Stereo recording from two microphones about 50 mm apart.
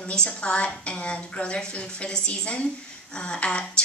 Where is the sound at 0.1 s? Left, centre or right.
Centre.